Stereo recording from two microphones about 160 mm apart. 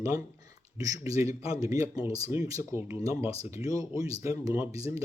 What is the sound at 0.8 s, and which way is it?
Speech, 20° right (ahead or behind).